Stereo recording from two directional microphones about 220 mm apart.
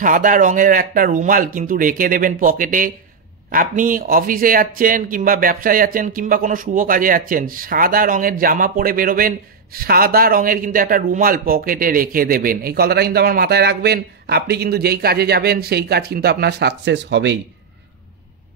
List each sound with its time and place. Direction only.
0.0 s speech: 40° right (ahead or behind)